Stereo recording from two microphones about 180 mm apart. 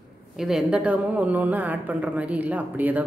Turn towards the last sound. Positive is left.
turn(degrees=-10)  # may be behind; listen again after turning